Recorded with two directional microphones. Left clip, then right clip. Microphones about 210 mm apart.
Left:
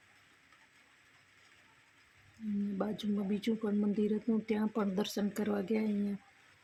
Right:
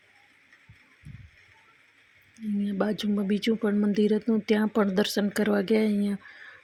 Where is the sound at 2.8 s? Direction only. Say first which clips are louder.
Right 10 dB; 25° right (ahead or behind).